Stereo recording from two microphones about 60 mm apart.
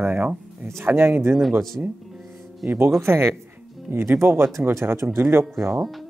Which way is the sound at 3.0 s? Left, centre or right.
Right.